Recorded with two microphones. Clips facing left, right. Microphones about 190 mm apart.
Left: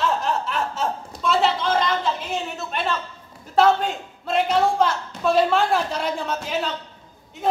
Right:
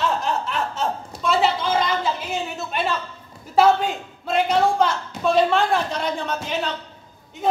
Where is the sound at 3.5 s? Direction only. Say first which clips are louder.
Right 1 dB; 5° right (ahead or behind).